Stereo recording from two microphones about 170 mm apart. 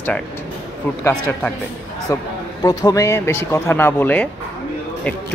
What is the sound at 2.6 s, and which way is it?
Speech, 20° left (ahead or behind).